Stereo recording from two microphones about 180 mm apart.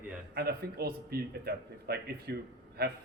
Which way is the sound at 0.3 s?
60° right (ahead or behind).